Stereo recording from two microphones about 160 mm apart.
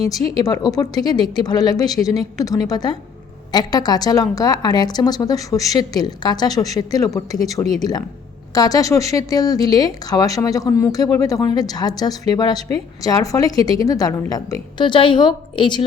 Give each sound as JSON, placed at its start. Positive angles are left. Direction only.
{"t": 0.3, "sound": "a woman's voice", "side_deg": 25}